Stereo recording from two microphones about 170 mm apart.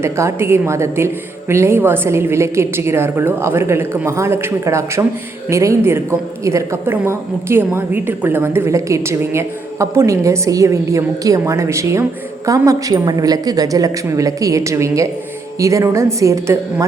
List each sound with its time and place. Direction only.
0.0 s a woman's voice: 15° right (ahead or behind)